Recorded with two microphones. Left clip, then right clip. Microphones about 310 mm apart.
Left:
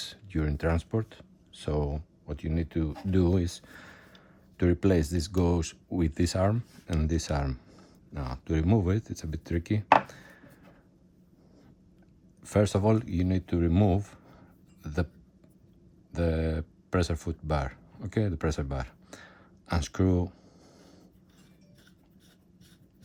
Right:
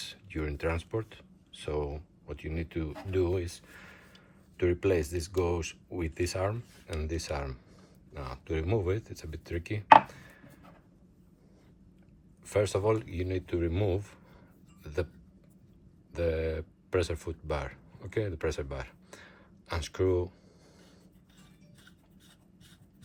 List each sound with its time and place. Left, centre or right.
0.0 s speech: left
12.4 s speech: left
16.1 s speech: left